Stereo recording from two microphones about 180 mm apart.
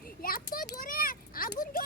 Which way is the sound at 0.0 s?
55° left (ahead or behind).